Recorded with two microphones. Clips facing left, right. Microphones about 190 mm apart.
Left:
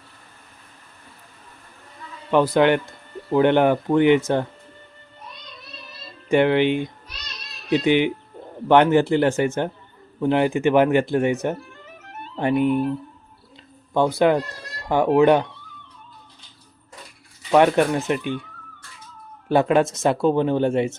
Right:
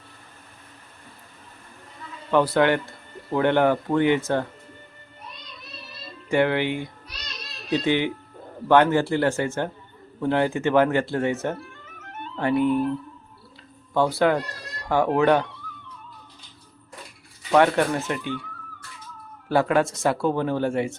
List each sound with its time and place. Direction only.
2.3 s speech: 15° left (ahead or behind)
6.2 s speech: 20° left (ahead or behind)
13.9 s speech: 20° left (ahead or behind)
17.5 s speech: 20° left (ahead or behind)
19.5 s speech: 20° left (ahead or behind)